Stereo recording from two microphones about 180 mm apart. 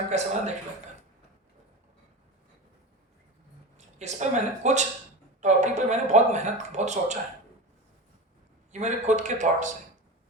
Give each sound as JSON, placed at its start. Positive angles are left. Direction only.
{"t": 0.1, "sound": "speech", "side_deg": -40}
{"t": 3.8, "sound": "speech", "side_deg": -40}
{"t": 8.7, "sound": "speech", "side_deg": -40}